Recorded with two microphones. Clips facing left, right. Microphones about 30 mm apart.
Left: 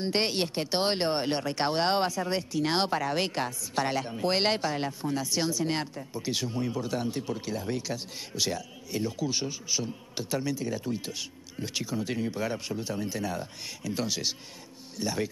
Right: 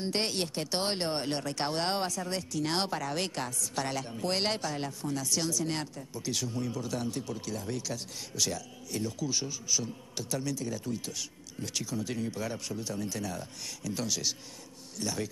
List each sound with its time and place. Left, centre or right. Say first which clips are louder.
0.0 s speech: left 4 dB; left